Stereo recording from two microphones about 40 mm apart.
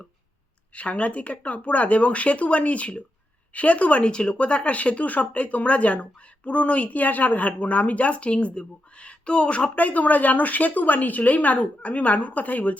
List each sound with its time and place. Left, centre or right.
0.7 s speech: left
9.7 s a woman's voice: left